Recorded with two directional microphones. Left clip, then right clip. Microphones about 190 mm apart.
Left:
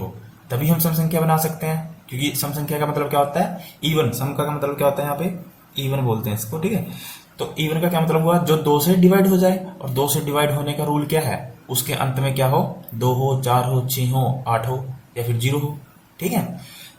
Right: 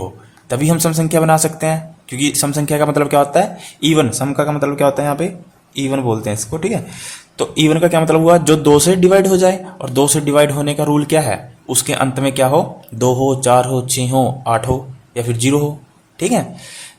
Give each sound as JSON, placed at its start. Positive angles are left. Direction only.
{"t": 0.5, "sound": "a man's voice", "side_deg": -50}